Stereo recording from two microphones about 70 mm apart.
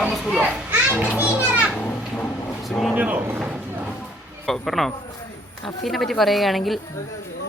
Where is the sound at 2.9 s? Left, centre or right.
Right.